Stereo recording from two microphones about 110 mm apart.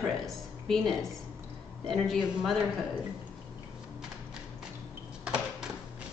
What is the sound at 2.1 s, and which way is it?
Speech, centre (ahead or behind).